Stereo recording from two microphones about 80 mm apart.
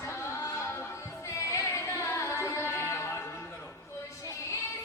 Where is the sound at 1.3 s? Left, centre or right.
Left.